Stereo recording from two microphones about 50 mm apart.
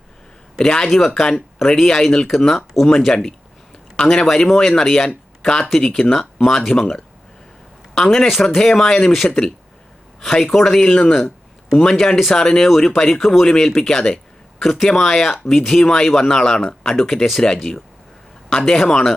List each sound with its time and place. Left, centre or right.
0.6 s speech: centre
10.8 s speech: centre